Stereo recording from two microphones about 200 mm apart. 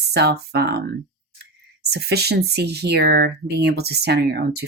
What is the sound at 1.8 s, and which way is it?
Speech, 55° right (ahead or behind).